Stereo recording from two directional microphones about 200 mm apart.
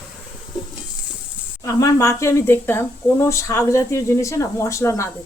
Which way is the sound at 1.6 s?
15° left (ahead or behind).